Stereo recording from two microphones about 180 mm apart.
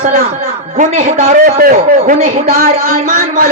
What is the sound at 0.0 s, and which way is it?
A man's voice, 50° right (ahead or behind).